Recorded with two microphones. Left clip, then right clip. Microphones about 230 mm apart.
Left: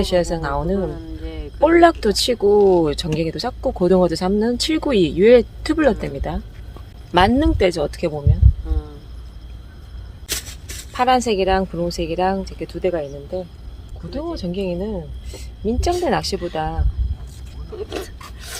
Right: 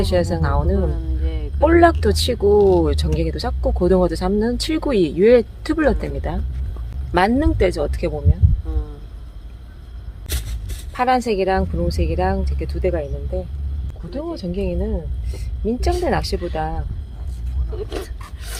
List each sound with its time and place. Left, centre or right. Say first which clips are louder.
0.0 s speech: left 1 dB; centre
10.2 s a sound: left 5 dB; left
10.9 s speech: left 1 dB; centre
17.7 s filing: left 1 dB; centre